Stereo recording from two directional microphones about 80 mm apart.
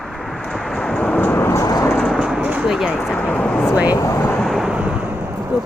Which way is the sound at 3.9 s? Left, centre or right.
Left.